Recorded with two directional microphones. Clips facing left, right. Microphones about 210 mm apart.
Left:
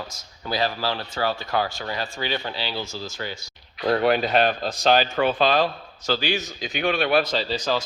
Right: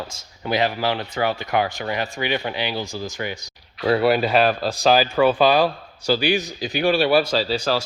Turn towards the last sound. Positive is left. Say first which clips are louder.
# right 4 dB
turn(degrees=-10)  # may be behind; listen again after turning